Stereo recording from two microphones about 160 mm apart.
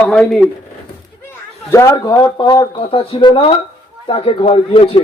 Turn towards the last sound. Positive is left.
turn(degrees=35)  # may be behind; listen again after turning